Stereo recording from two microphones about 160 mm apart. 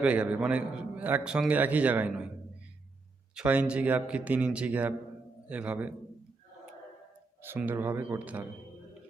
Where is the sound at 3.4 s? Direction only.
10° right (ahead or behind).